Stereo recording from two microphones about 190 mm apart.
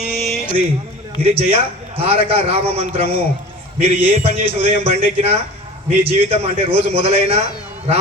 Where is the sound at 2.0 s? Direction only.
30° right (ahead or behind).